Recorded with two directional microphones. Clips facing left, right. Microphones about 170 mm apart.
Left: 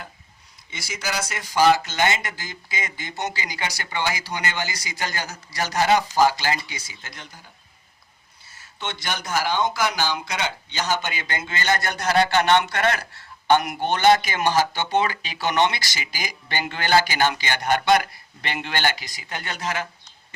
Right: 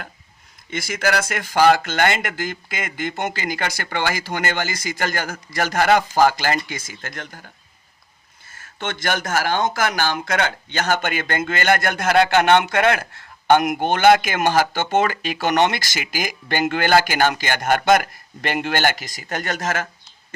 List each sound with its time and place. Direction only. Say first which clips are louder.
0.7 s speech: right 8 dB; 55° right (ahead or behind)
8.4 s speech: right 4 dB; 50° right (ahead or behind)